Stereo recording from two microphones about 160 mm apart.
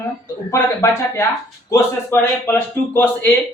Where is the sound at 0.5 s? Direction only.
15° left (ahead or behind).